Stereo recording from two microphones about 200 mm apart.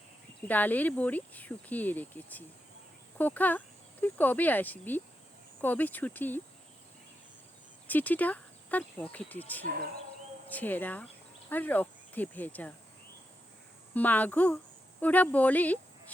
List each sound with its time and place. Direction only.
0.4 s speech: 10° left (ahead or behind)
7.9 s speech: 10° left (ahead or behind)
13.9 s speech: 10° left (ahead or behind)